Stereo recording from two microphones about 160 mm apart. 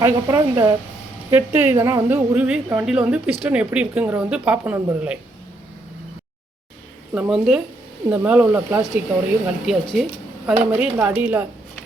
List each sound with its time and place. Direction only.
0.0 s a woman's voice: 20° right (ahead or behind)
7.1 s a woman's voice: 5° right (ahead or behind)
9.6 s speech: centre (ahead or behind)
10.4 s a woman's voice: 10° right (ahead or behind)